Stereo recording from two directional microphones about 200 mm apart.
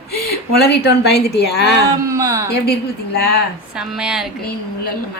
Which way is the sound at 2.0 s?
15° right (ahead or behind).